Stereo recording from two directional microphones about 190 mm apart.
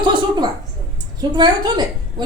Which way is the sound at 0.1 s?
20° right (ahead or behind).